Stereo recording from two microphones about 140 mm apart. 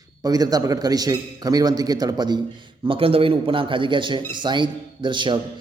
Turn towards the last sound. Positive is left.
turn(degrees=-35)  # may be behind; listen again after turning